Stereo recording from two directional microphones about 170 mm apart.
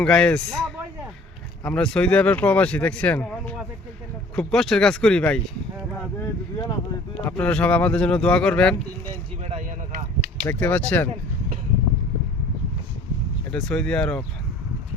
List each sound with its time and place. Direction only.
0.0 s speech: 5° left (ahead or behind)
6.1 s speech: 25° left (ahead or behind)
7.3 s speech: 5° left (ahead or behind)
9.4 s speech: 40° right (ahead or behind)
10.4 s speech: 10° left (ahead or behind)
13.5 s speech: 5° left (ahead or behind)